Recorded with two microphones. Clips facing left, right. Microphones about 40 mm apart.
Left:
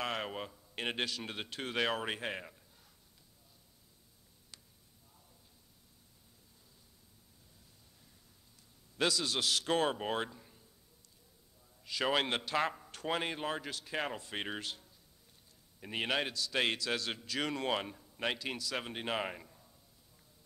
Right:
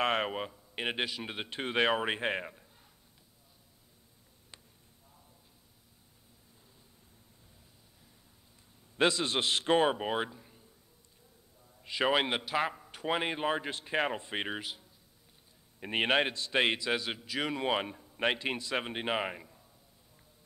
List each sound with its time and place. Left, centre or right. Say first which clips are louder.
0.0 s a sound: right 7 dB; right
0.3 s a man's voice: right 5 dB; centre
8.9 s a man's voice: right 5 dB; right; by 10.6 s centre
11.8 s a man's voice: right 4 dB; right
14.5 s a man's voice: right 2 dB; centre
15.8 s a man's voice: right 6 dB; right; by 19.7 s centre